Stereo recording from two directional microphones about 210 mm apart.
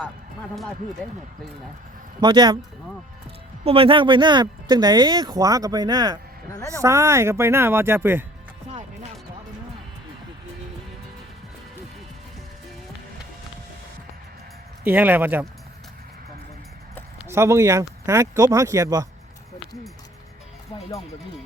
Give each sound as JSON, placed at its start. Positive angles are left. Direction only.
{"t": 1.0, "sound": "speech", "side_deg": 10}
{"t": 2.2, "sound": "speech", "side_deg": -20}
{"t": 3.6, "sound": "speech", "side_deg": -25}
{"t": 14.8, "sound": "speech", "side_deg": -10}
{"t": 17.2, "sound": "speech", "side_deg": -15}